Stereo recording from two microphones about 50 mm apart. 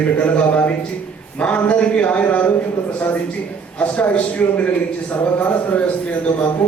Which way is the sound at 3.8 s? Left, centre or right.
Left.